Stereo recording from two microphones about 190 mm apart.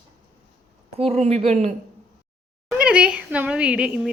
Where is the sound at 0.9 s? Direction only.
30° right (ahead or behind).